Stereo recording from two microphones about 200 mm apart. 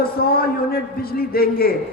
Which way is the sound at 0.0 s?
50° left (ahead or behind).